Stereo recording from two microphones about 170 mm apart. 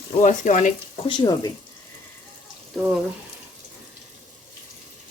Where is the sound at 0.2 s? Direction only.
45° left (ahead or behind).